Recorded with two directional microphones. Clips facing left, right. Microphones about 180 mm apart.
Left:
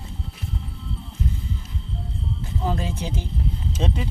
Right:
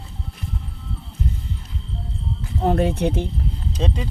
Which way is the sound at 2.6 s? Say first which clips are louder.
Right 9 dB; 60° right (ahead or behind).